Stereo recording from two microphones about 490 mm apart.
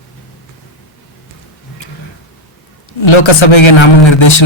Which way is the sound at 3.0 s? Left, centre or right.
Left.